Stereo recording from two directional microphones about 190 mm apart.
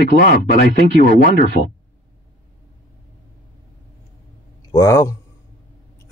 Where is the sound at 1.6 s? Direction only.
70° left (ahead or behind).